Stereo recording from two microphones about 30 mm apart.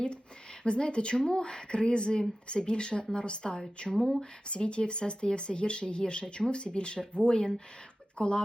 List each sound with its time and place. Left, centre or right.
0.6 s speech: left